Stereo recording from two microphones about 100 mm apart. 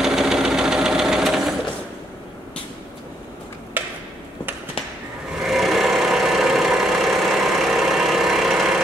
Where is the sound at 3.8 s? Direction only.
20° right (ahead or behind).